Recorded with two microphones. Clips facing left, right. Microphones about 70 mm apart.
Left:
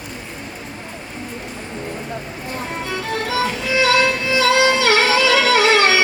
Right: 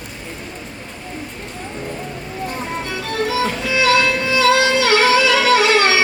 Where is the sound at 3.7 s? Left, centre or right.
Left.